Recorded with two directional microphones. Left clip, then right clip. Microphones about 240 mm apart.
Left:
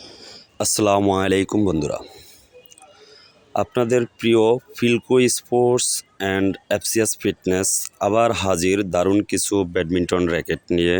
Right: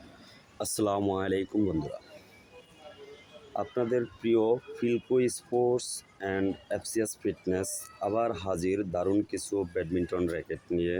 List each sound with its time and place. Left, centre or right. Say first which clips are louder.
0.6 s speech: left 11 dB; left
3.5 s speech: left 10 dB; left